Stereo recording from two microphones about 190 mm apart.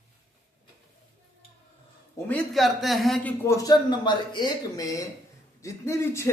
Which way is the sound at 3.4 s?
15° left (ahead or behind).